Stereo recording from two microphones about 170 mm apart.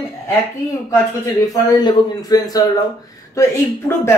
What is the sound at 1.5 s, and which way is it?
A man's voice, 20° left (ahead or behind).